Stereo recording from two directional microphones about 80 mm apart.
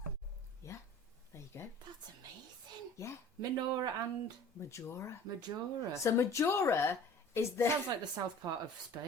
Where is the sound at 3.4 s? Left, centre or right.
Right.